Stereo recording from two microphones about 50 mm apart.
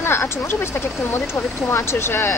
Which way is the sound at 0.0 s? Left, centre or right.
Left.